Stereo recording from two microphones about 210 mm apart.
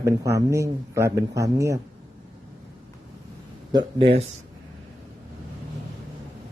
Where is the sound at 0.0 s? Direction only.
15° right (ahead or behind).